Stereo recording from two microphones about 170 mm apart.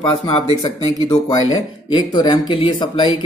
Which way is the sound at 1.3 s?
25° left (ahead or behind).